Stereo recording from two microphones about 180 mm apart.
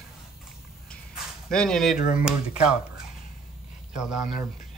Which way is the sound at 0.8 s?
5° left (ahead or behind).